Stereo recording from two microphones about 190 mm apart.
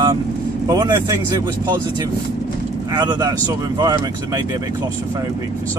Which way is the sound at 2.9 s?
20° right (ahead or behind).